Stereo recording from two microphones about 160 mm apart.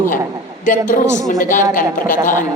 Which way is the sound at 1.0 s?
20° right (ahead or behind).